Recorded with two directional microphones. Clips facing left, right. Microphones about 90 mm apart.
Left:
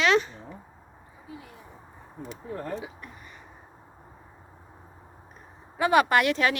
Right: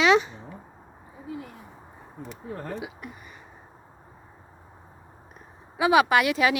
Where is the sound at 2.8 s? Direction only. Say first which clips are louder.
Right 3 dB; 15° right (ahead or behind).